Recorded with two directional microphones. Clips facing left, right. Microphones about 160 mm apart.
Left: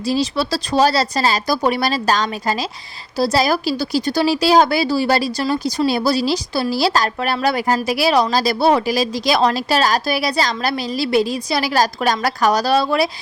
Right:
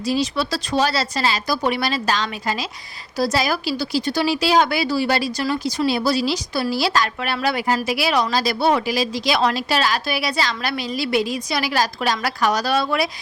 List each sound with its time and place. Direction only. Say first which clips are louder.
0.0 s a woman's voice: left 2 dB; 35° left (ahead or behind)